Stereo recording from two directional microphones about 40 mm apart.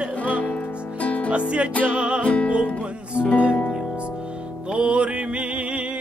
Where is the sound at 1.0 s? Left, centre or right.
Left.